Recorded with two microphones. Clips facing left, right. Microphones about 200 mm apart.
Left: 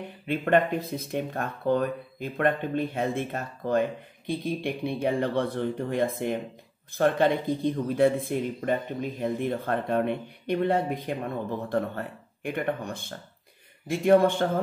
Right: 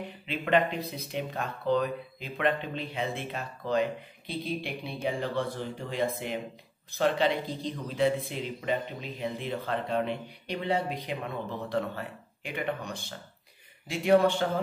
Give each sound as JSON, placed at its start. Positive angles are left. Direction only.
{"t": 0.3, "sound": "speech", "side_deg": 50}